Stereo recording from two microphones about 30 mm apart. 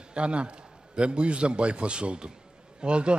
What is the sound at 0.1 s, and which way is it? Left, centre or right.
A man's voice, right.